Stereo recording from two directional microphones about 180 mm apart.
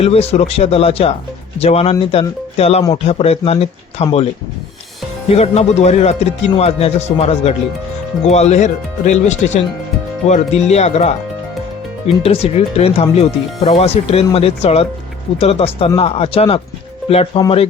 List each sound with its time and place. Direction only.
0.0 s speech: 35° left (ahead or behind)
5.3 s speech: 35° left (ahead or behind)